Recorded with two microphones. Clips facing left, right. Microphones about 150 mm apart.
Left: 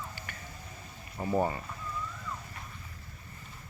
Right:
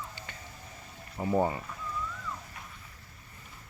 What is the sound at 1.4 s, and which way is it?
Speech, 15° right (ahead or behind).